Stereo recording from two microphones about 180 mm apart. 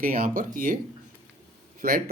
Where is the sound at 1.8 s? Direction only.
55° right (ahead or behind).